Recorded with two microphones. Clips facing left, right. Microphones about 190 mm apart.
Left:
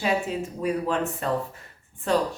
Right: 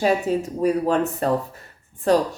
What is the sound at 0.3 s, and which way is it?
Speech, 40° right (ahead or behind).